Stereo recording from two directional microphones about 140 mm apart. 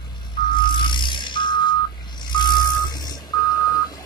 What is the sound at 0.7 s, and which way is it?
Vehicle, 35° left (ahead or behind).